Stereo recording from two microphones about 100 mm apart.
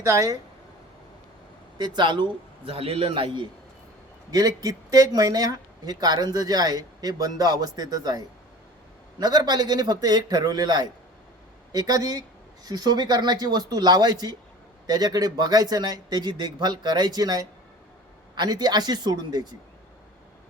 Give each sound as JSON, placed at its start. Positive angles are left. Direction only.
{"t": 0.0, "sound": "speech", "side_deg": -30}
{"t": 1.8, "sound": "speech", "side_deg": -45}
{"t": 2.6, "sound": "a man's voice", "side_deg": -70}
{"t": 4.3, "sound": "speech", "side_deg": -40}